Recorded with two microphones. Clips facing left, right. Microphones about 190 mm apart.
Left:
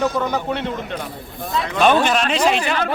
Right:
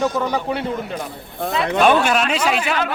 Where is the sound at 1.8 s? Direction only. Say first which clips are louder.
Left 1 dB; 5° right (ahead or behind).